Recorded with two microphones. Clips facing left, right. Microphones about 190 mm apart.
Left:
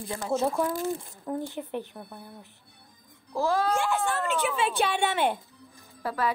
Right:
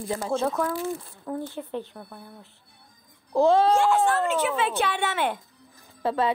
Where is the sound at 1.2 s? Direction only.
15° left (ahead or behind).